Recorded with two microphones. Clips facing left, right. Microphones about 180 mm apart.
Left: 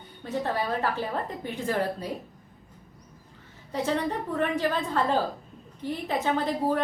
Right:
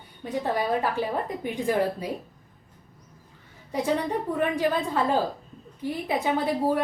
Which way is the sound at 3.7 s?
10° right (ahead or behind).